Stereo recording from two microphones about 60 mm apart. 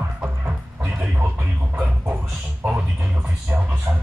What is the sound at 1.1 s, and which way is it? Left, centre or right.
Music, right.